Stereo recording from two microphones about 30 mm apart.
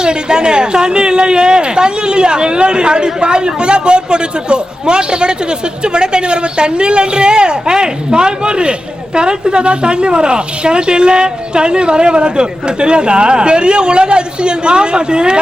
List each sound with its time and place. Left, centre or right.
0.0 s speech: right